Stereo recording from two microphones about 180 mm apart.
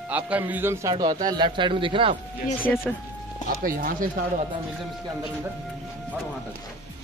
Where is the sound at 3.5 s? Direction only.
55° right (ahead or behind).